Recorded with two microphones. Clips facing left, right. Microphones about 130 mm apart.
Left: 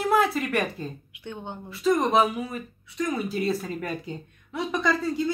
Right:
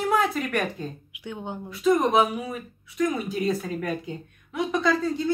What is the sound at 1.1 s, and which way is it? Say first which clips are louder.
A woman's voice: right 2 dB; 10° right (ahead or behind).